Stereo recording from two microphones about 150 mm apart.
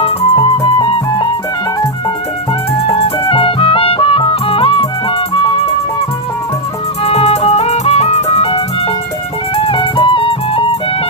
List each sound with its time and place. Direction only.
0.0 s music: 35° left (ahead or behind)
3.0 s music: 40° left (ahead or behind)
7.0 s music: 45° left (ahead or behind)